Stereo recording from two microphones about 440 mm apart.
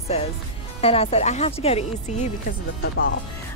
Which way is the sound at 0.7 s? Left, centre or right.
Centre.